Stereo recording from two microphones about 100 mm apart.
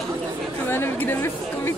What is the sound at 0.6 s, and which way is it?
Chatter, 25° left (ahead or behind).